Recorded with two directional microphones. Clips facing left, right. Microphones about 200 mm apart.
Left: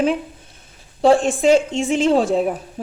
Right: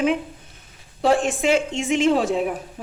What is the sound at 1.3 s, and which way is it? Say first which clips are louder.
A woman's voice: left 5 dB; 35° left (ahead or behind).